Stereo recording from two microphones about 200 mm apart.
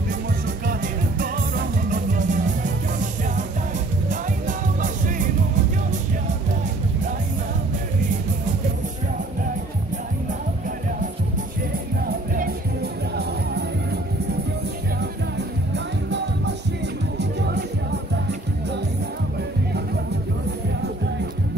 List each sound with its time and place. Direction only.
0.7 s music: 45° right (ahead or behind)
13.1 s music: 55° right (ahead or behind)
15.7 s music: 60° right (ahead or behind)